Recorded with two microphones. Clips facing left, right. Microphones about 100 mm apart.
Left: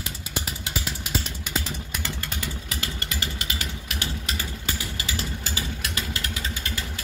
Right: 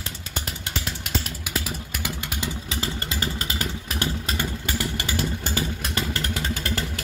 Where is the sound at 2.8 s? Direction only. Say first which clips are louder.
Right 5 dB; 35° right (ahead or behind).